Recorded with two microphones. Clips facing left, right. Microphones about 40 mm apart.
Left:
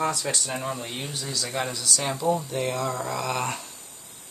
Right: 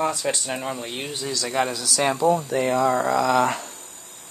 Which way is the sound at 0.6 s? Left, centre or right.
Right.